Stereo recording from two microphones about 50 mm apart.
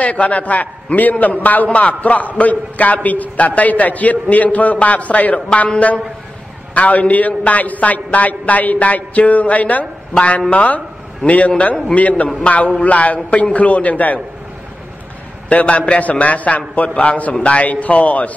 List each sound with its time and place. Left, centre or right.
0.0 s a man's voice: left
6.7 s a man's voice: left
15.4 s a man's voice: left